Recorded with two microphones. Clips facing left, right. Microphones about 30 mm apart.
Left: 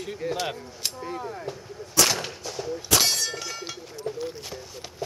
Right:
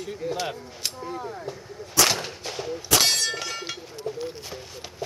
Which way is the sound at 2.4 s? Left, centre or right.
Right.